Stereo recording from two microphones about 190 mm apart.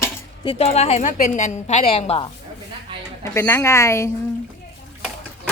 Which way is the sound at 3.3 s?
15° left (ahead or behind).